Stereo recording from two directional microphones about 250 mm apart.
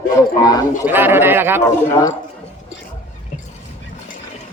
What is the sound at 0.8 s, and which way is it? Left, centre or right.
Speech, centre.